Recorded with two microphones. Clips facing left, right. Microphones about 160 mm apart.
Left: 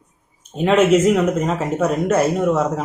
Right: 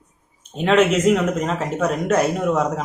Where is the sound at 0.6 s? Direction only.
5° left (ahead or behind).